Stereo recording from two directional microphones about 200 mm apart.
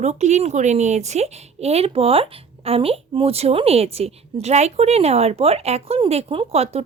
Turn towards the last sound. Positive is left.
turn(degrees=-30)  # may be behind; listen again after turning